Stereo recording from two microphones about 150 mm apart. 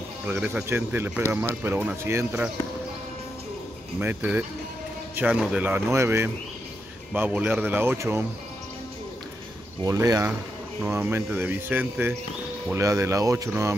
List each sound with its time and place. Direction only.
0.3 s speech: 10° right (ahead or behind)
4.0 s speech: 10° right (ahead or behind)
9.8 s speech: 20° right (ahead or behind)